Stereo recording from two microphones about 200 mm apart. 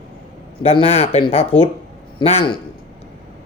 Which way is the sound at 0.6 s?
30° left (ahead or behind).